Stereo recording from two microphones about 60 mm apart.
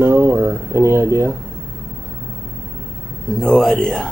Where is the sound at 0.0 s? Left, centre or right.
Right.